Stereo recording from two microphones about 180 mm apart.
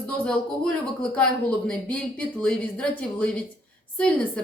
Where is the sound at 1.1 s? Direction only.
5° left (ahead or behind).